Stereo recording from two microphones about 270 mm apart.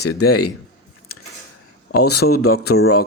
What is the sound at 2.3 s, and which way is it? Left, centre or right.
Speech, left.